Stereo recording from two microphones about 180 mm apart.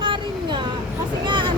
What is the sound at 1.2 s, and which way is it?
Vehicle, 25° right (ahead or behind).